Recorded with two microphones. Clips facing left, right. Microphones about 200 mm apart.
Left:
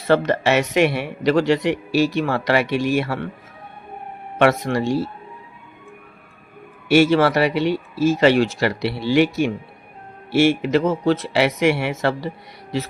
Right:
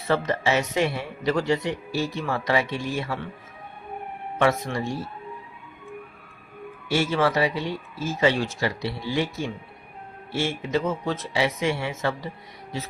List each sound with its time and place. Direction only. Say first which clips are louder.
0.1 s a man's voice: left 6 dB; 75° left (ahead or behind)
4.4 s speech: left 6 dB; 75° left (ahead or behind)
6.8 s a man's voice: left 8 dB; 75° left (ahead or behind)